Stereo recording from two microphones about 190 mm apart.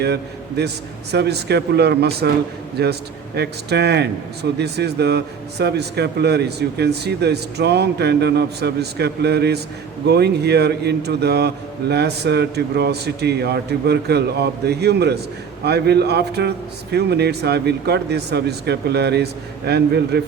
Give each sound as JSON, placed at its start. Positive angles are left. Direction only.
{"t": 0.0, "sound": "a man's voice", "side_deg": -60}